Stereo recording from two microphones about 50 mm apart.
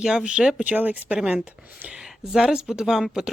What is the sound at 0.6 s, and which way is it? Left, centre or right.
Speech, right.